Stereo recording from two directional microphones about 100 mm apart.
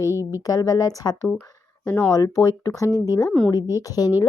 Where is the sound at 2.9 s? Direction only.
30° right (ahead or behind).